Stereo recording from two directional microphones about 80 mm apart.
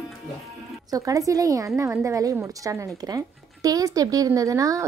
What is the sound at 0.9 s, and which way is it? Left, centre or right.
A woman's voice, right.